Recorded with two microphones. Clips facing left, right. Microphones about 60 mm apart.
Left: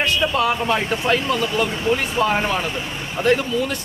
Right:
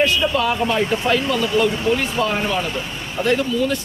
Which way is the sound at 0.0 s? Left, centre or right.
Left.